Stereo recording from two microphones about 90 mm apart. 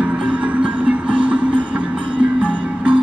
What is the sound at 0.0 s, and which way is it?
Music, 15° right (ahead or behind).